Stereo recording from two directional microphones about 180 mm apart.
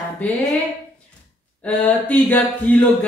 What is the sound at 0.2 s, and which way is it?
Speech, 10° left (ahead or behind).